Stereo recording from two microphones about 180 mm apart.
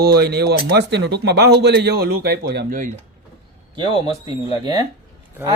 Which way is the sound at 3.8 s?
25° right (ahead or behind).